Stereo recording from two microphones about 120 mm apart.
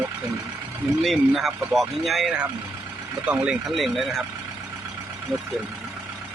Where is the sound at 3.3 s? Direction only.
10° right (ahead or behind).